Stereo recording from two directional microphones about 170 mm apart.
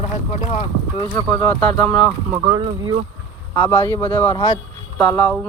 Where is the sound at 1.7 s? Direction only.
5° left (ahead or behind).